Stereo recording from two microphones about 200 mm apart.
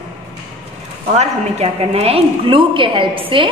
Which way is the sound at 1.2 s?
30° right (ahead or behind).